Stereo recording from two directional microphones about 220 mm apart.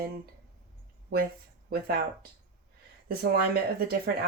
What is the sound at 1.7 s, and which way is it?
Speech, 45° right (ahead or behind).